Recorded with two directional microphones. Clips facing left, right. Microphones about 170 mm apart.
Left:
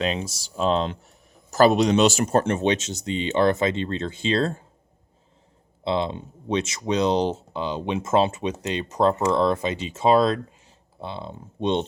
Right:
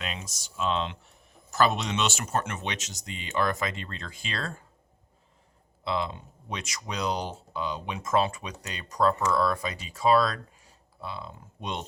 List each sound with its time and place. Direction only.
0.0 s speech: 30° left (ahead or behind)
5.8 s speech: 25° left (ahead or behind)